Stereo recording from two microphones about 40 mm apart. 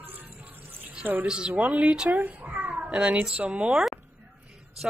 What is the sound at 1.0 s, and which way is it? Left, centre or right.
Speech, right.